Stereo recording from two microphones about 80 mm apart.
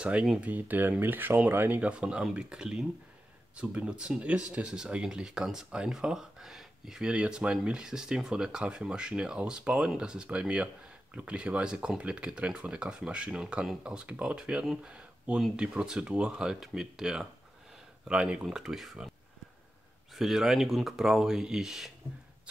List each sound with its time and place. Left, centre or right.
0.0 s speech: centre
1.8 s speech: centre
20.2 s speech: centre